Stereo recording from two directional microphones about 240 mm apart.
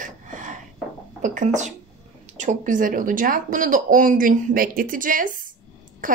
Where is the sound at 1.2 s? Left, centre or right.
Right.